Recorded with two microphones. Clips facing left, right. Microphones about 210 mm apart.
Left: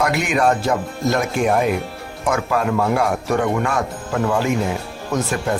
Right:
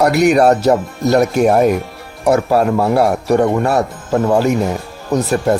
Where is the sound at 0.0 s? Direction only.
40° right (ahead or behind).